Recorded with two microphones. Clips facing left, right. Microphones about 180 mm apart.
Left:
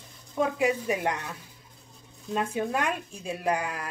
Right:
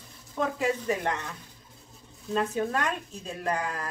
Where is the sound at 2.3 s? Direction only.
10° left (ahead or behind).